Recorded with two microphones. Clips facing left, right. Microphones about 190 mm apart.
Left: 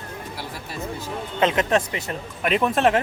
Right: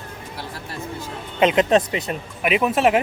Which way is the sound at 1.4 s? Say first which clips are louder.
Right 4 dB; 20° right (ahead or behind).